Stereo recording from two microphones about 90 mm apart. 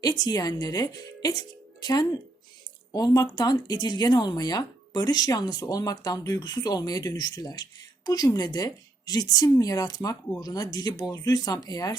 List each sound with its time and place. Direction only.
0.0 s speech: 50° left (ahead or behind)